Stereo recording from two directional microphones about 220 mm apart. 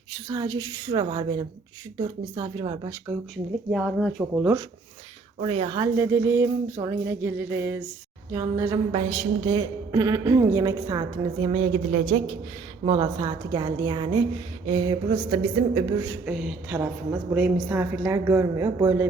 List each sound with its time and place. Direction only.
0.3 s a woman's voice: 20° right (ahead or behind)
3.1 s speech: centre (ahead or behind)
5.4 s a woman's voice: 25° right (ahead or behind)
8.9 s a woman's voice: 25° right (ahead or behind)
12.8 s a woman's voice: 20° right (ahead or behind)
15.9 s a woman's voice: 10° right (ahead or behind)